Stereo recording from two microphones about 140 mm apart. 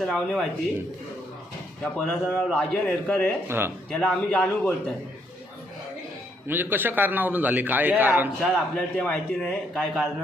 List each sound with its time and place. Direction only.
0.0 s a man's voice: 5° left (ahead or behind)
1.8 s a man's voice: 10° left (ahead or behind)
3.4 s a man's voice: 15° right (ahead or behind)
3.8 s a man's voice: 5° left (ahead or behind)
6.5 s a man's voice: 15° right (ahead or behind)
8.7 s a man's voice: 10° left (ahead or behind)